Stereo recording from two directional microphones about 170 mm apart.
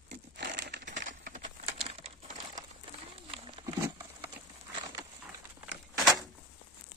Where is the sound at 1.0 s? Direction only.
50° right (ahead or behind); by 3.6 s 30° right (ahead or behind).